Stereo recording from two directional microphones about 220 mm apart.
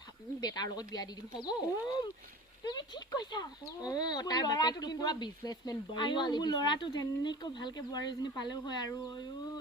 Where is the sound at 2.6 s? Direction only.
20° left (ahead or behind).